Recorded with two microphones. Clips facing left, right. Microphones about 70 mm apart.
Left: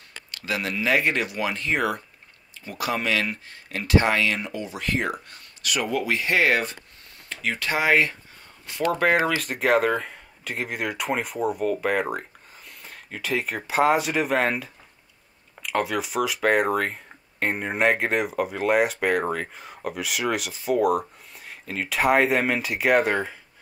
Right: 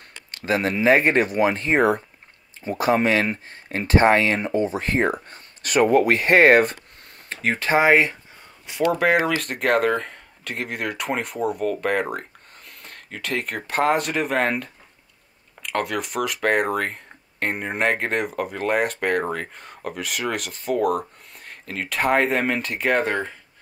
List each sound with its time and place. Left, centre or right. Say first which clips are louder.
0.3 s speech: right 6 dB; right
7.2 s speech: right 5 dB; right
8.6 s speech: right 2 dB; centre